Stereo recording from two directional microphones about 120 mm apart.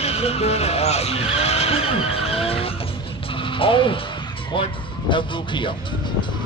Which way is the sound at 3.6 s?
45° left (ahead or behind).